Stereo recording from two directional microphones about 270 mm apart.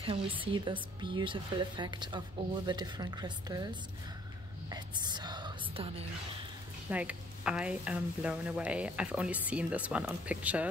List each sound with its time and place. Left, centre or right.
0.4 s speech: centre
6.9 s speech: centre